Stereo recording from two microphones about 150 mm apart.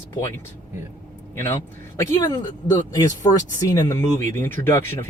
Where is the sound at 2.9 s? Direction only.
25° left (ahead or behind).